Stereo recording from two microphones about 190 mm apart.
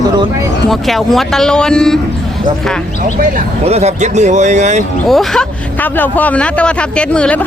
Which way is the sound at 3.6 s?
35° right (ahead or behind).